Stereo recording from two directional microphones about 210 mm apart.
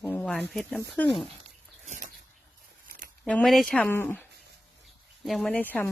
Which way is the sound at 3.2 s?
5° left (ahead or behind).